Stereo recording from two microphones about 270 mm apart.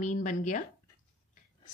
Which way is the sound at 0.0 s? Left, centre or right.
Left.